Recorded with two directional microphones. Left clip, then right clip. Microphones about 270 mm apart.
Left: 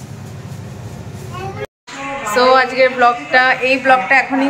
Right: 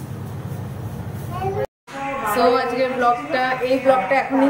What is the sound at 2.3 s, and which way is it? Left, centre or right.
A woman's voice, centre.